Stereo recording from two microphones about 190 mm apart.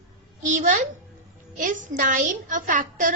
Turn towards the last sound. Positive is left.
turn(degrees=-45)  # may be behind; listen again after turning